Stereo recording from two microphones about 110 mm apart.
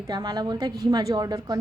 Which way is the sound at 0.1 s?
40° right (ahead or behind).